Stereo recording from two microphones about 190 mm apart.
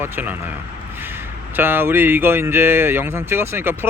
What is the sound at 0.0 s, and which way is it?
Speech, 10° right (ahead or behind).